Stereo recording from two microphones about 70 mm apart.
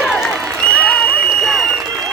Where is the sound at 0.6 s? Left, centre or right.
Centre.